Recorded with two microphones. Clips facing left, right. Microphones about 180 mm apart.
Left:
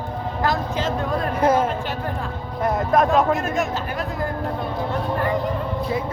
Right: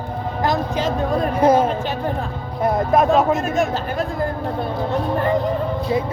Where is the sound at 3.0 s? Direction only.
25° right (ahead or behind).